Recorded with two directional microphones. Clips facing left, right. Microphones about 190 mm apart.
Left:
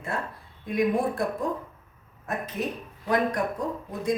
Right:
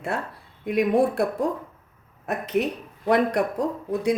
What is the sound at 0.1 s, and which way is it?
Speech, 75° right (ahead or behind).